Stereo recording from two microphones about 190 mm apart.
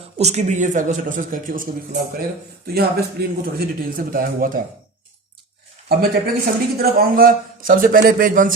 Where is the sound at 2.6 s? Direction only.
55° right (ahead or behind).